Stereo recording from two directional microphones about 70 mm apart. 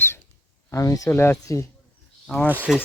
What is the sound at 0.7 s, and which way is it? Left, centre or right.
Speech, left.